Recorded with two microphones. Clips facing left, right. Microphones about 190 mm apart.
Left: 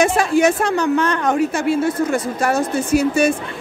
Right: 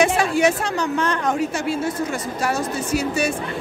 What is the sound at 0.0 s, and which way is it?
A woman's voice, 45° left (ahead or behind).